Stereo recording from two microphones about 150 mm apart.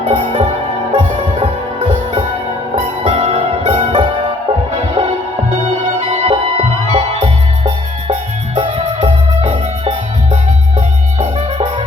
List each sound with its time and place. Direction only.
0.0 s music: 40° right (ahead or behind)
2.7 s music: 40° right (ahead or behind)
9.0 s music: 45° right (ahead or behind)